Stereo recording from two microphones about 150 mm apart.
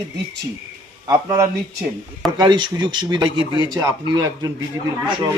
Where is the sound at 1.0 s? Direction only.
25° right (ahead or behind).